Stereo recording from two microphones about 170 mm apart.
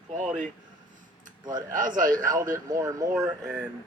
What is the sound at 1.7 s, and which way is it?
Speech, 50° right (ahead or behind).